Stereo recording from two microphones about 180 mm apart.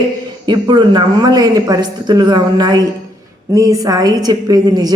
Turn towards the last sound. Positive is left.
turn(degrees=-20)  # may be behind; listen again after turning